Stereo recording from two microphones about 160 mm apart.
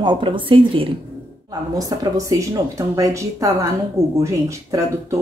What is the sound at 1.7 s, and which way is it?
Speech, 20° right (ahead or behind).